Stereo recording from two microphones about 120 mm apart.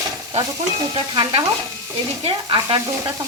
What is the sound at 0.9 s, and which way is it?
Speech, 40° right (ahead or behind).